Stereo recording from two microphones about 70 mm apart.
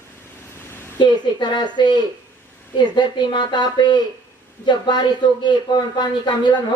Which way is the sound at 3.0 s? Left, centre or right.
Left.